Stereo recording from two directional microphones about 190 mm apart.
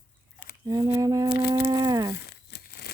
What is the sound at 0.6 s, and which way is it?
Humming, 20° right (ahead or behind).